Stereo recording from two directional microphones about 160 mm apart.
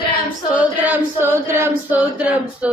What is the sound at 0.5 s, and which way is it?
Chant, 10° right (ahead or behind).